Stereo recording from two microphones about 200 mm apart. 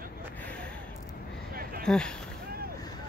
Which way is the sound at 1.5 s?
45° right (ahead or behind).